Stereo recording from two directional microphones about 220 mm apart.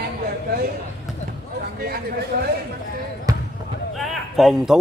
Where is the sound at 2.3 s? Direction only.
45° right (ahead or behind).